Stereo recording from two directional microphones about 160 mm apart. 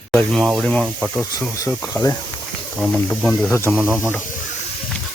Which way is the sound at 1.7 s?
10° left (ahead or behind).